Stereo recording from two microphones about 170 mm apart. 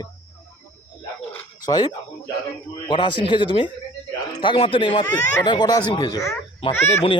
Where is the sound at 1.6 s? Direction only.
25° left (ahead or behind).